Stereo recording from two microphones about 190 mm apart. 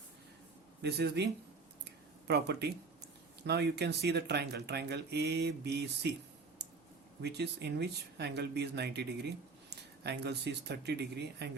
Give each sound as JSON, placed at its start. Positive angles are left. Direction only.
{"t": 0.8, "sound": "speech", "side_deg": -60}
{"t": 7.2, "sound": "speech", "side_deg": -60}